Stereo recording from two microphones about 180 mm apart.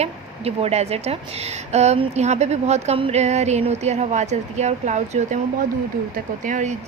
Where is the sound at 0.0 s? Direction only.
35° right (ahead or behind).